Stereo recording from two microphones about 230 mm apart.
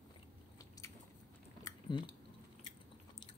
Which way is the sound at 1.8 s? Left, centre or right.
Centre.